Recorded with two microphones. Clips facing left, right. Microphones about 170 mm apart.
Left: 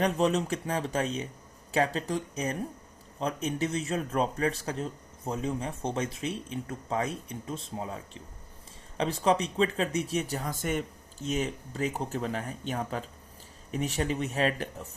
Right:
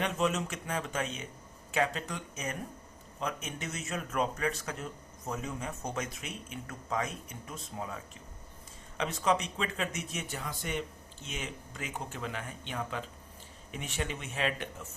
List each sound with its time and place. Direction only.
0.0 s speech: 35° left (ahead or behind)